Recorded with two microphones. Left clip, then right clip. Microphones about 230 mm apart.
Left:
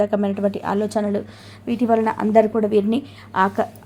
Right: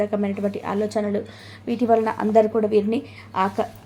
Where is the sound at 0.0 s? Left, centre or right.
Centre.